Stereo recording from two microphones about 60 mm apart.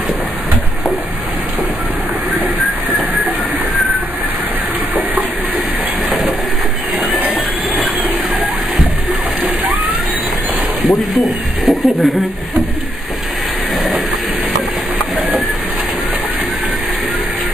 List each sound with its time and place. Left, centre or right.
6.0 s train: centre
10.9 s a man's voice: centre